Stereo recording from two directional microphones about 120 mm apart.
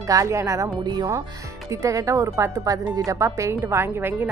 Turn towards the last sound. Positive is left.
turn(degrees=-20)  # may be behind; listen again after turning